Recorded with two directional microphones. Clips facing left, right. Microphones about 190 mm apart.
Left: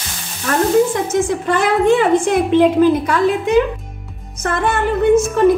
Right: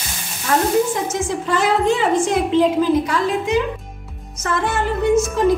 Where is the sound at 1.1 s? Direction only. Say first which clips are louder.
Left 4 dB; 55° left (ahead or behind).